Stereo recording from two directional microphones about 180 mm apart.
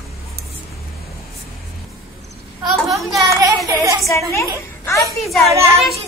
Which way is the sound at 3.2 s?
20° right (ahead or behind).